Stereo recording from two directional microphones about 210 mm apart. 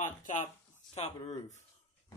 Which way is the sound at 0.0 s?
35° left (ahead or behind).